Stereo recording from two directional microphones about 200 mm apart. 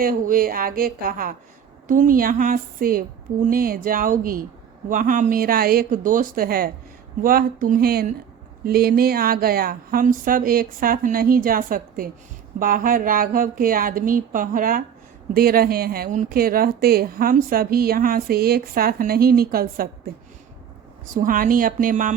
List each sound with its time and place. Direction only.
0.0 s speech: 45° right (ahead or behind)
21.1 s speech: 40° right (ahead or behind)